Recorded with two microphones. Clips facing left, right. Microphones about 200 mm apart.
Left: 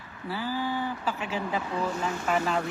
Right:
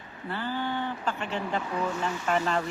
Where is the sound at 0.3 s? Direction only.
5° left (ahead or behind).